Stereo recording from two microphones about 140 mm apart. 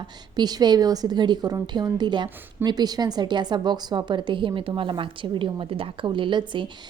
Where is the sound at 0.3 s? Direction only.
30° right (ahead or behind).